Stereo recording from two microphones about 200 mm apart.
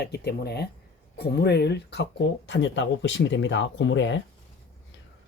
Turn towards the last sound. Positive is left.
turn(degrees=65)  # may be behind; listen again after turning